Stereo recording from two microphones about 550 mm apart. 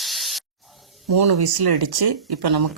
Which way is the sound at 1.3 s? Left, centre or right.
Right.